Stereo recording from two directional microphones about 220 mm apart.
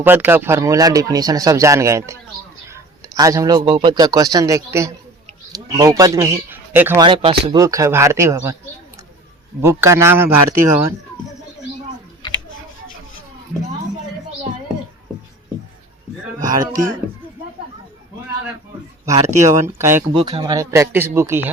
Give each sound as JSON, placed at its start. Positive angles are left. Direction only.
{"t": 0.0, "sound": "a man's voice", "side_deg": -10}
{"t": 7.0, "sound": "speech", "side_deg": -25}
{"t": 9.6, "sound": "speech", "side_deg": -15}
{"t": 12.2, "sound": "tick", "side_deg": 20}
{"t": 16.4, "sound": "speech", "side_deg": -15}
{"t": 19.1, "sound": "speech", "side_deg": -35}
{"t": 19.5, "sound": "speech", "side_deg": -10}
{"t": 20.1, "sound": "speech", "side_deg": -20}